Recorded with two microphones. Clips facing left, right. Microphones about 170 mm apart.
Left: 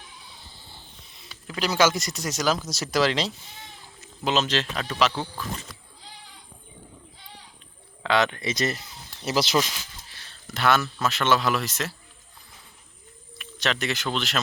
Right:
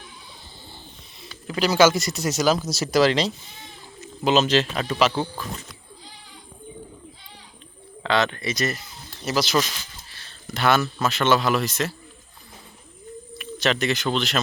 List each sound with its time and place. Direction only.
1.6 s speech: 5° right (ahead or behind)
8.0 s speech: 10° left (ahead or behind)
9.6 s speech: 15° left (ahead or behind)
10.1 s a sound: 15° left (ahead or behind)
10.4 s speech: centre (ahead or behind)
13.4 s speech: 5° right (ahead or behind)